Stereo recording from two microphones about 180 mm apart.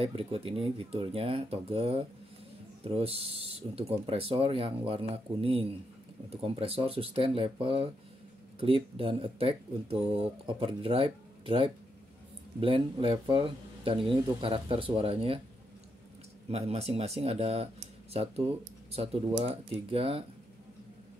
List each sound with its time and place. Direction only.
0.0 s speech: 30° right (ahead or behind)
16.4 s speech: 35° right (ahead or behind)